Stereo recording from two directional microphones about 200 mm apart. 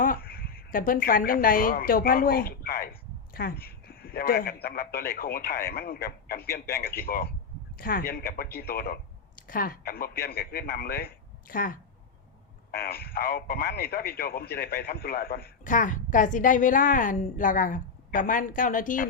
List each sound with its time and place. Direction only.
0.0 s speech: 45° left (ahead or behind)
6.7 s speech: 10° left (ahead or behind)
7.0 s a man's voice: 50° left (ahead or behind)